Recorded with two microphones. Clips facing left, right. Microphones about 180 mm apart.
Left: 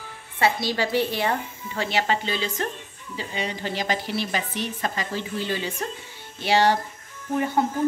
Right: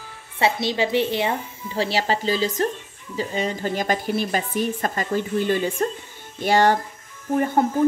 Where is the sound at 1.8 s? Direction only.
35° right (ahead or behind).